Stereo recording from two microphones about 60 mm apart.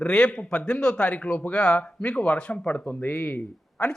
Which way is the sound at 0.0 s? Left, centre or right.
Centre.